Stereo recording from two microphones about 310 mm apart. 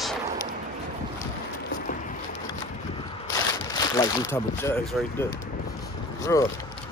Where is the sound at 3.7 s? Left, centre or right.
Centre.